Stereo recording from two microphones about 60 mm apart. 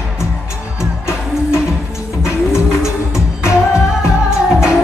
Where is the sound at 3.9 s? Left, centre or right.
Centre.